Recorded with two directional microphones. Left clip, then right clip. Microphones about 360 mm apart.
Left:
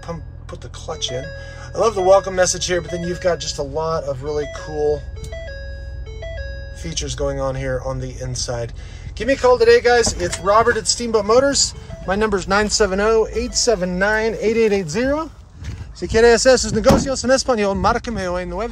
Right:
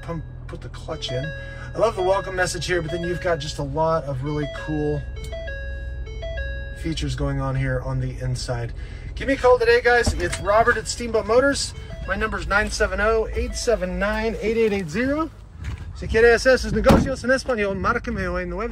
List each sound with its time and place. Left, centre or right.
0.8 s speech: centre
6.9 s speech: centre